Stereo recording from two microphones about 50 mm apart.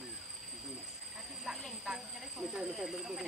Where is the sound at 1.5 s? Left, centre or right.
Centre.